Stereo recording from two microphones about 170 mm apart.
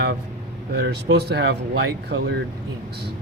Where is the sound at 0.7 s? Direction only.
80° right.